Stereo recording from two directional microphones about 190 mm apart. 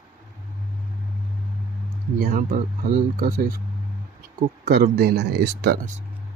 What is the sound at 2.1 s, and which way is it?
Speech, 50° right (ahead or behind).